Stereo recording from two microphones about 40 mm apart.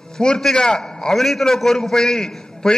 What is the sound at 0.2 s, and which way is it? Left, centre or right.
Speech, centre.